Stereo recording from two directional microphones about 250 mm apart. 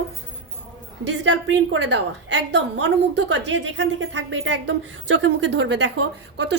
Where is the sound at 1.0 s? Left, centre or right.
Right.